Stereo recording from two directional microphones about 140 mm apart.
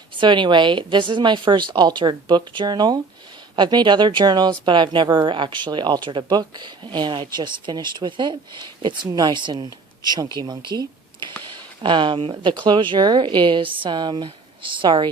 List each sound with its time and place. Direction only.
0.2 s speech: 35° right (ahead or behind)
11.4 s a sound: 35° right (ahead or behind)
12.4 s speech: 35° right (ahead or behind)